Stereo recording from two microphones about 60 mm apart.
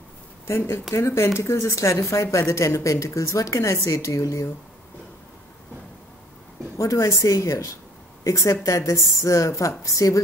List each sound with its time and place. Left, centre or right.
0.9 s speech: left
6.8 s a woman's voice: left